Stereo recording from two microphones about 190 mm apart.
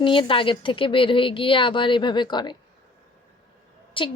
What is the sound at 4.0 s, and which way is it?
Speech, 25° left (ahead or behind).